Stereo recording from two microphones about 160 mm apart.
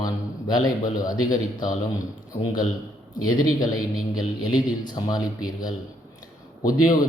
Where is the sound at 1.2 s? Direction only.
55° left (ahead or behind).